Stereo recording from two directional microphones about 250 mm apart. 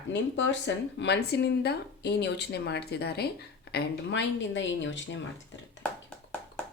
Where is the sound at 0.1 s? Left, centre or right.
Left.